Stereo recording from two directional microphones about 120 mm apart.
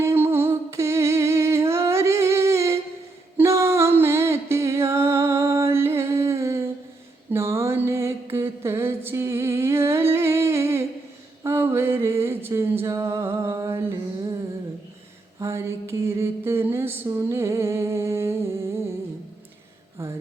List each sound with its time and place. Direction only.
0.0 s humming: 20° right (ahead or behind)
3.3 s music: 25° right (ahead or behind)
7.3 s mantra: 20° right (ahead or behind)
9.0 s humming: 25° right (ahead or behind)
11.4 s a sound: 20° right (ahead or behind)
15.4 s mantra: 25° right (ahead or behind)
20.0 s a sound: 20° right (ahead or behind)